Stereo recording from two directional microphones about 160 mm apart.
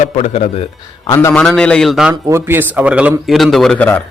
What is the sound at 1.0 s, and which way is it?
Speech, 20° left (ahead or behind).